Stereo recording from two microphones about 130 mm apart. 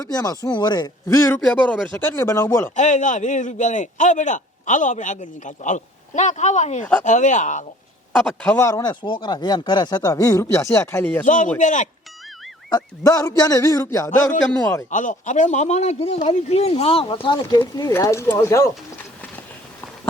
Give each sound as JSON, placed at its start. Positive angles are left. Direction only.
{"t": 0.0, "sound": "speech", "side_deg": 30}
{"t": 1.6, "sound": "speech", "side_deg": 10}
{"t": 2.0, "sound": "speech", "side_deg": 25}
{"t": 2.7, "sound": "a man's voice", "side_deg": 70}
{"t": 8.1, "sound": "a man's voice", "side_deg": 5}
{"t": 8.5, "sound": "speech", "side_deg": 20}
{"t": 11.3, "sound": "a man's voice", "side_deg": 80}
{"t": 12.7, "sound": "speech", "side_deg": 25}
{"t": 14.8, "sound": "speech", "side_deg": 75}